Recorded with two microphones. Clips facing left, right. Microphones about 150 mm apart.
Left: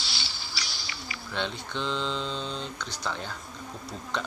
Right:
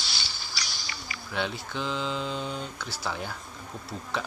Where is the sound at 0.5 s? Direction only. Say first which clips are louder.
Right 2 dB; 45° right (ahead or behind).